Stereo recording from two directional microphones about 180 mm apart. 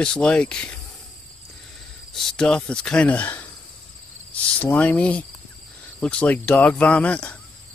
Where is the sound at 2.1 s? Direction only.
Centre (ahead or behind).